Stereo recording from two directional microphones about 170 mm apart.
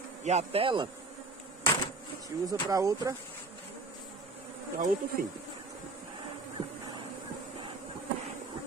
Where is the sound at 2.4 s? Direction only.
20° right (ahead or behind).